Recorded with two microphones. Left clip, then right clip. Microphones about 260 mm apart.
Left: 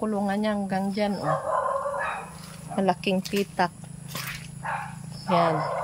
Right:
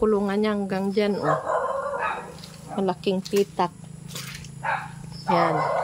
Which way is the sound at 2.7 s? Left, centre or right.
Centre.